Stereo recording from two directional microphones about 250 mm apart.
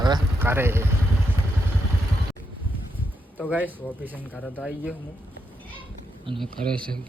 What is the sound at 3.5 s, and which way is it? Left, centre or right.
Speech, centre.